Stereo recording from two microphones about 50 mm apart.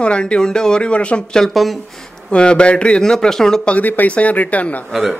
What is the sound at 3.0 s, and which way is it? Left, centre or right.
Speech, centre.